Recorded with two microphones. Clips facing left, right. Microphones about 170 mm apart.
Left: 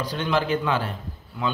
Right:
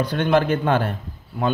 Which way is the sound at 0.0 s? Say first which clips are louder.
Right 6 dB; 55° right (ahead or behind).